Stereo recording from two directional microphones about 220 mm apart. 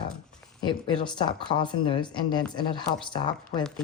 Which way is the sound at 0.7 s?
20° left (ahead or behind).